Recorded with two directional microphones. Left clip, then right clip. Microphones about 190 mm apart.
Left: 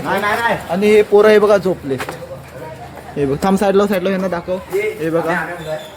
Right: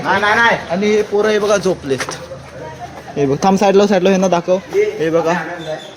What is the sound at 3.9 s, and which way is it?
Speech, 25° right (ahead or behind).